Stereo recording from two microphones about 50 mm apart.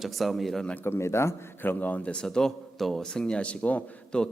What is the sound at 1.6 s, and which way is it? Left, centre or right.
Speech, left.